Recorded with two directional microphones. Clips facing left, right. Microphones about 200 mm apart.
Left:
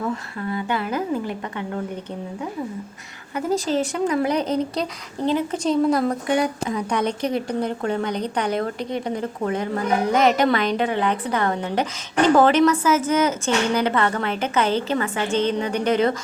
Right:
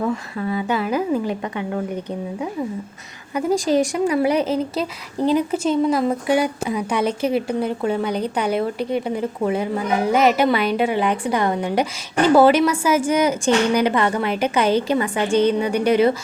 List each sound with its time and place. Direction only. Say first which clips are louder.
0.3 s speech: right 3 dB; 15° right (ahead or behind)
3.3 s speech: right 4 dB; 15° right (ahead or behind)
5.6 s speech: left 2 dB; centre (ahead or behind)